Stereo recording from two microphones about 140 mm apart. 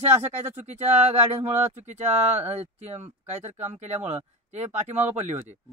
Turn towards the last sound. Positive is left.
turn(degrees=-55)  # may be behind; listen again after turning